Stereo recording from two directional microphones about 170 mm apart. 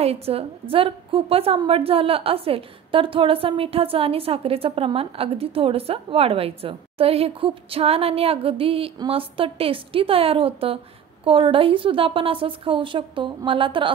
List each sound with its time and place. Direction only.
0.0 s a woman's voice: 35° right (ahead or behind)